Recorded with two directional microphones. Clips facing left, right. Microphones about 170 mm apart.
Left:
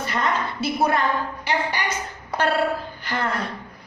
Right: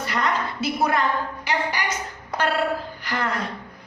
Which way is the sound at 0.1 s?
25° left (ahead or behind).